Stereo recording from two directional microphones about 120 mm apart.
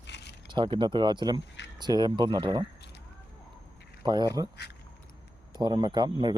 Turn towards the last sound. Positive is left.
turn(degrees=-35)  # may be behind; listen again after turning